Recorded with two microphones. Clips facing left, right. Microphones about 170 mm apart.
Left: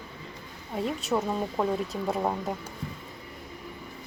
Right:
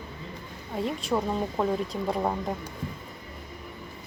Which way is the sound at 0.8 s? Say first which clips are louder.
Even; centre (ahead or behind).